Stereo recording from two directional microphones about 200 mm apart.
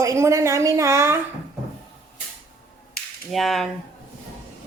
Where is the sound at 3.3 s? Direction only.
Centre (ahead or behind).